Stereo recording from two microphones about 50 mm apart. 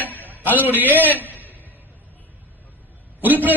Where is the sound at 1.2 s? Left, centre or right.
Left.